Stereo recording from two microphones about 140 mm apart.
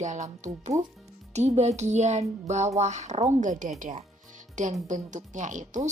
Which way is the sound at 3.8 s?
60° right (ahead or behind).